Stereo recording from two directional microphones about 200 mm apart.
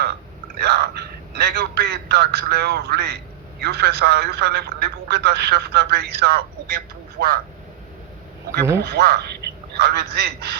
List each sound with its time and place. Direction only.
0.5 s a sound: 55° right (ahead or behind)
3.6 s a man's voice: 55° right (ahead or behind)
8.8 s a man's voice: 55° right (ahead or behind)